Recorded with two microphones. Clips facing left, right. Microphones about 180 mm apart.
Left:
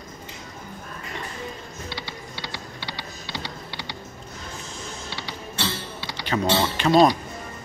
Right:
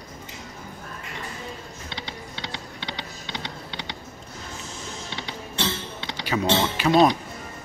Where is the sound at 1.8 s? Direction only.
20° right (ahead or behind).